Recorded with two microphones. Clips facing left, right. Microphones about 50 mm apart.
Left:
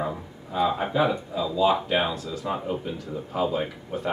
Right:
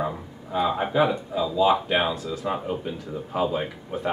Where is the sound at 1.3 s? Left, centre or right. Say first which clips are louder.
Right 2 dB; right.